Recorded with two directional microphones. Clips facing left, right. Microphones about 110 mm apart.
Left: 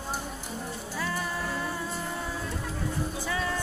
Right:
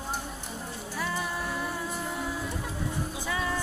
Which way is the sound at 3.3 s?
10° right (ahead or behind).